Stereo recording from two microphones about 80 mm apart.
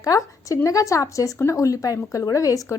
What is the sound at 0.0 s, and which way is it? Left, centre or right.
A woman's voice, left.